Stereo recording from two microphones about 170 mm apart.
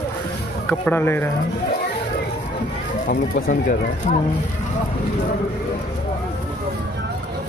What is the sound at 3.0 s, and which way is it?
Speech, 50° left (ahead or behind).